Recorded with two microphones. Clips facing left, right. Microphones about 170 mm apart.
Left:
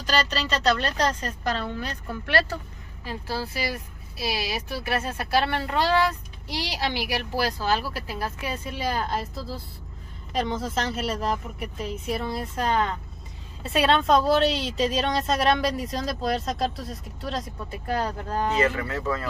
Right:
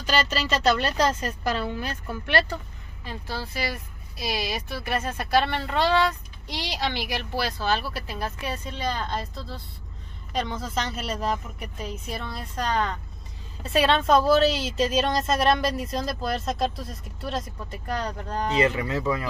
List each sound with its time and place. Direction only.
0.0 s a woman's voice: 5° right (ahead or behind)
3.1 s a woman's voice: 10° left (ahead or behind)
18.6 s a woman's voice: 15° right (ahead or behind)